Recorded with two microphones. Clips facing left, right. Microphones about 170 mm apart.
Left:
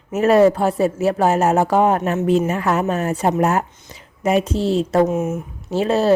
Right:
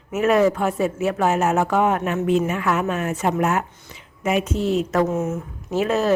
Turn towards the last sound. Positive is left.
turn(degrees=30)  # may be behind; listen again after turning